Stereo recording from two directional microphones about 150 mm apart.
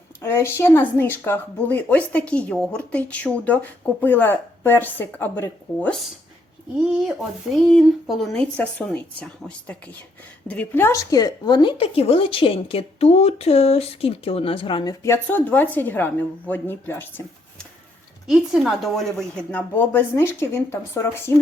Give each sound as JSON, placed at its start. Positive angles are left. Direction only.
{"t": 0.2, "sound": "a woman's voice", "side_deg": 15}
{"t": 6.7, "sound": "speech", "side_deg": -5}
{"t": 15.0, "sound": "a woman's voice", "side_deg": 15}
{"t": 18.3, "sound": "a woman's voice", "side_deg": 0}